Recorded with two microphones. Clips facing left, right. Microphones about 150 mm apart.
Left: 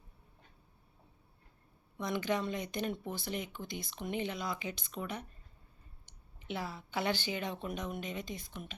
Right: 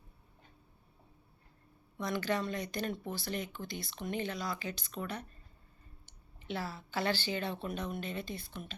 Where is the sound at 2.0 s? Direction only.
20° left (ahead or behind).